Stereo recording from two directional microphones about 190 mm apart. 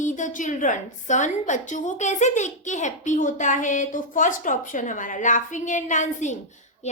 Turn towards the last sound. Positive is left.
turn(degrees=40)  # may be behind; listen again after turning